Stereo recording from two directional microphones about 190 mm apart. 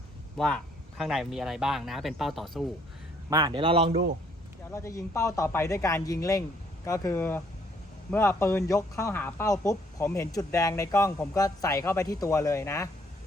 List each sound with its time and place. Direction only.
0.3 s speech: 5° left (ahead or behind)
3.2 s a man's voice: 20° right (ahead or behind)
4.7 s speech: 15° left (ahead or behind)